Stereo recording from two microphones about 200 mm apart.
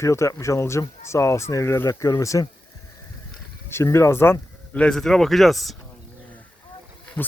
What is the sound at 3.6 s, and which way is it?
Speech, 15° left (ahead or behind).